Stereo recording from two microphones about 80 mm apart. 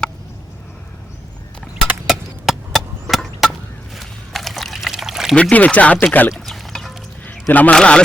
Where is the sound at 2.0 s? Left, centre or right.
Centre.